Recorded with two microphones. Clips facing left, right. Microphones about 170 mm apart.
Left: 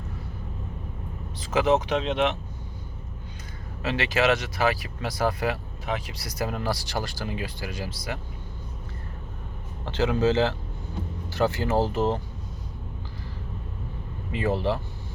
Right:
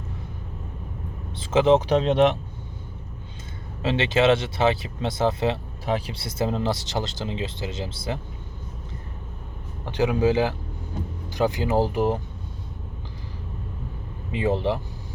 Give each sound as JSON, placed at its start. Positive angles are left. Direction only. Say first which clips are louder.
{"t": 1.4, "sound": "speech", "louder": "right 4 dB", "side_deg": -25}
{"t": 3.8, "sound": "speech", "louder": "right 4 dB", "side_deg": -25}
{"t": 9.8, "sound": "speech", "louder": "right 2 dB", "side_deg": -15}
{"t": 14.3, "sound": "speech", "louder": "right 2 dB", "side_deg": -20}